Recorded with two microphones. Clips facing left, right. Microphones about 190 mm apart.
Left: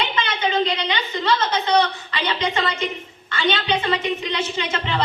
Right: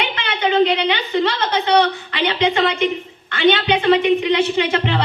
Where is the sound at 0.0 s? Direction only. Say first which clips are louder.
Right 2 dB; 65° right (ahead or behind).